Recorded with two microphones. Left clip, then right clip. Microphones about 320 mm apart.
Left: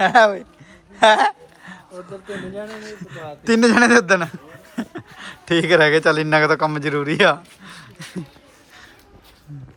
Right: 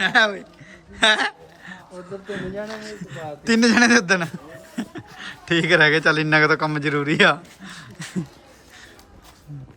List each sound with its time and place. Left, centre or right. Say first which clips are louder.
0.0 s a man's voice: left 5 dB; centre
0.9 s a sound: left 5 dB; centre
2.2 s a man's voice: right 1 dB; centre